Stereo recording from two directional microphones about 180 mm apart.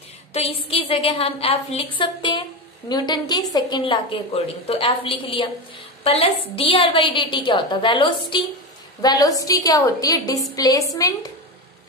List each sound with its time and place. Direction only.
0.3 s a woman's voice: 35° left (ahead or behind); by 11.1 s 20° left (ahead or behind)